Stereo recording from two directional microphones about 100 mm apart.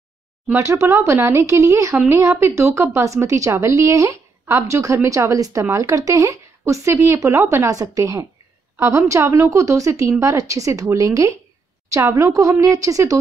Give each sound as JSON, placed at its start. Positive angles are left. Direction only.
{"t": 0.6, "sound": "a woman's voice", "side_deg": -30}